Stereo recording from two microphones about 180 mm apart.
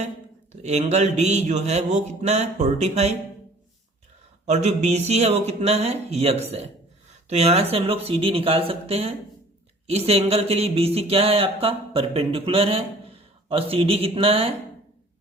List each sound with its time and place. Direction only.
0.5 s speech: 40° right (ahead or behind)
4.4 s speech: 40° right (ahead or behind)